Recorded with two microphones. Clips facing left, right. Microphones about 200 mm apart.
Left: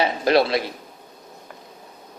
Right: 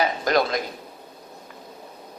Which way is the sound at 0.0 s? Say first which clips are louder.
Left 3 dB; 30° left (ahead or behind).